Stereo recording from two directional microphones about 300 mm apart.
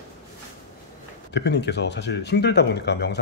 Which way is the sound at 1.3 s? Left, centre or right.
Left.